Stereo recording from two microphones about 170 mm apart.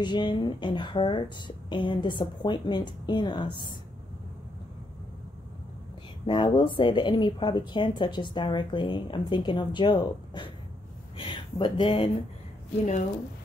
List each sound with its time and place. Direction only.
0.0 s speech: 25° left (ahead or behind)
6.2 s speech: 30° left (ahead or behind)